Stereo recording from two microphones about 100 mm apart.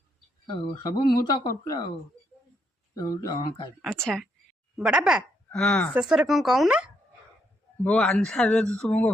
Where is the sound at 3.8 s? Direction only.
5° left (ahead or behind).